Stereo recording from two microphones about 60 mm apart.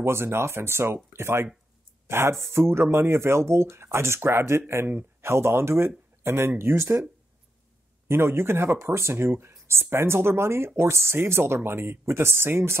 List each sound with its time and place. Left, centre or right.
0.0 s speech: right
8.1 s speech: right